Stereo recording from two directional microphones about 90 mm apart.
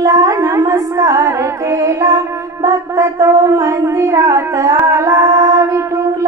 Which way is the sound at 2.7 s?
35° right (ahead or behind).